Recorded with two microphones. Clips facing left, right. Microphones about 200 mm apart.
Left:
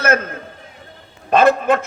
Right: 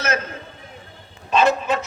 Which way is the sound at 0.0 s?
55° left (ahead or behind).